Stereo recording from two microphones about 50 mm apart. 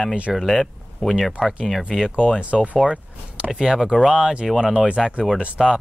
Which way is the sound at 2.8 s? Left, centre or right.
Centre.